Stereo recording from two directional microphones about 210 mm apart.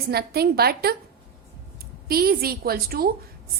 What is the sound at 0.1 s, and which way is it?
Speech, 50° right (ahead or behind).